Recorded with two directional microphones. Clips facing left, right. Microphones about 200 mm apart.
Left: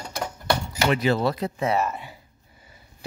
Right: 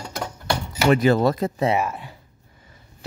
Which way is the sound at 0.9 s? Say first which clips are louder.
Right 6 dB; 45° right (ahead or behind).